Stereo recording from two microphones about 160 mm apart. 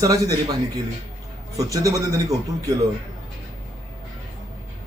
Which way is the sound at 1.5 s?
20° right (ahead or behind).